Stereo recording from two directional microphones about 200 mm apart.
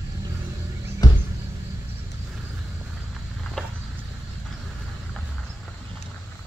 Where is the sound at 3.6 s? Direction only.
5° left (ahead or behind).